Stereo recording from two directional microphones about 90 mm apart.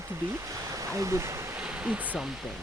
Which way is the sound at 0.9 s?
35° right (ahead or behind).